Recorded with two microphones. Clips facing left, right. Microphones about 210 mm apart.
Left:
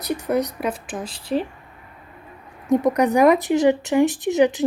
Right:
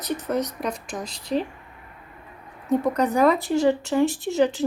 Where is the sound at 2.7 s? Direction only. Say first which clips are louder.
Left 4 dB; 15° left (ahead or behind).